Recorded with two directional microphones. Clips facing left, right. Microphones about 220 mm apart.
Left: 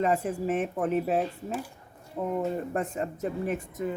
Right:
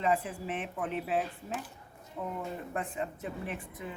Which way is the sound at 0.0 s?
45° left (ahead or behind).